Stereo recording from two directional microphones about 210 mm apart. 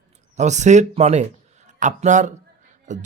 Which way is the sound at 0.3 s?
35° right (ahead or behind).